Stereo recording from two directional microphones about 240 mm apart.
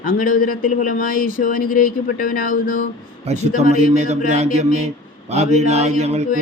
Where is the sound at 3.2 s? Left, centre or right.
Right.